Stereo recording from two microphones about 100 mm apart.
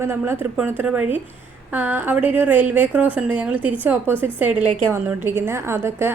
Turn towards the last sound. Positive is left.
turn(degrees=-25)  # may be behind; listen again after turning